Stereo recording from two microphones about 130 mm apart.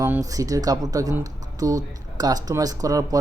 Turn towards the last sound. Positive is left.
turn(degrees=-30)  # may be behind; listen again after turning